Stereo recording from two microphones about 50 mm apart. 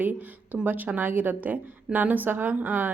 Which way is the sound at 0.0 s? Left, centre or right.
Right.